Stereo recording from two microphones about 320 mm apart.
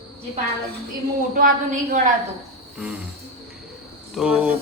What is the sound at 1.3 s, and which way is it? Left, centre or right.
Speech, right.